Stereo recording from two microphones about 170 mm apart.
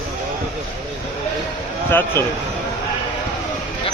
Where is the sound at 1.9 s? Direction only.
15° left (ahead or behind).